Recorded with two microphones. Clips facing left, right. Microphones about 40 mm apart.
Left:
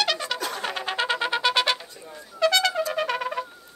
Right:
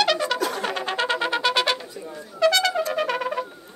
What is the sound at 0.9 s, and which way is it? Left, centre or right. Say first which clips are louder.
Music: even; centre.